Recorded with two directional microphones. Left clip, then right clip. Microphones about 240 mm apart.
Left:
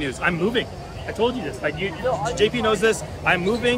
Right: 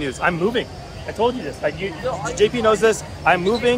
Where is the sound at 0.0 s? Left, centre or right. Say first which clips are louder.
Right 2 dB; centre.